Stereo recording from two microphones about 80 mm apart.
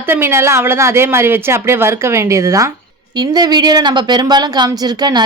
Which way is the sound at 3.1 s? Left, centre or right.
Right.